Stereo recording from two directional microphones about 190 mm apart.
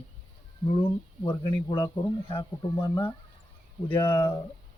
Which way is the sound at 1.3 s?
25° left (ahead or behind).